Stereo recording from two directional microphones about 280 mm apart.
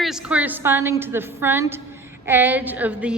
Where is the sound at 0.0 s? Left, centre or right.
Centre.